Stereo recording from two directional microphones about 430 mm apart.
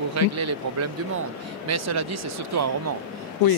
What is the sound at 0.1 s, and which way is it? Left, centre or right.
Speech, right.